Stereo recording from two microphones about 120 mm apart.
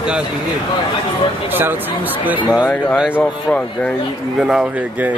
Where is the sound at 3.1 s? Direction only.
10° left (ahead or behind).